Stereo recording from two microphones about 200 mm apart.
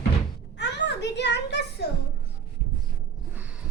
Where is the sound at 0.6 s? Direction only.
60° left (ahead or behind).